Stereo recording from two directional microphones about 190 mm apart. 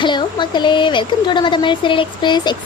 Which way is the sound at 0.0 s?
25° left (ahead or behind).